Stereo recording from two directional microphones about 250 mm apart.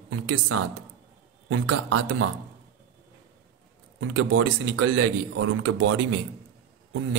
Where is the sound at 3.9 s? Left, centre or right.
Right.